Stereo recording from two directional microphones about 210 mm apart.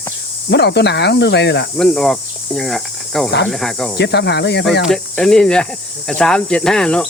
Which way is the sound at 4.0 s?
55° left (ahead or behind).